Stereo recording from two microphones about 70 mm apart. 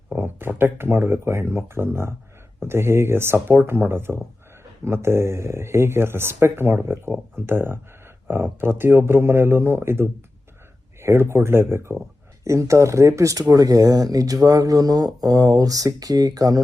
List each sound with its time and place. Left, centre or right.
0.1 s speech: right